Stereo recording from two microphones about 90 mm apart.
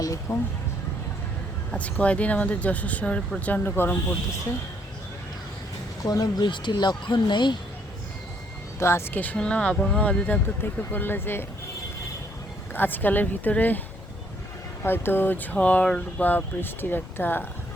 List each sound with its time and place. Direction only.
0.3 s speech: 35° left (ahead or behind)
1.7 s speech: 15° left (ahead or behind)
6.0 s speech: 40° left (ahead or behind)
6.5 s speech: 60° left (ahead or behind)
8.8 s speech: 30° left (ahead or behind)
12.7 s speech: 20° left (ahead or behind)
14.8 s speech: 25° left (ahead or behind)